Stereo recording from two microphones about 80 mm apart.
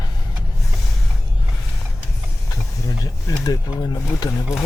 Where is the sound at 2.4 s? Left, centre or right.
Left.